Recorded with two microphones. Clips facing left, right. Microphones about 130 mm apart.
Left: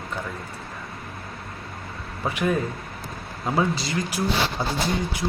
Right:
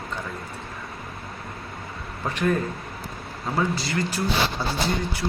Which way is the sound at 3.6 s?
15° left (ahead or behind).